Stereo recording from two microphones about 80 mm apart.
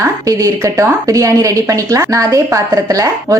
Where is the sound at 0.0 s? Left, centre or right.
Right.